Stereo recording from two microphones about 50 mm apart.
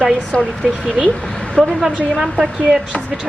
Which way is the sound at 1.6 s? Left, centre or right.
Centre.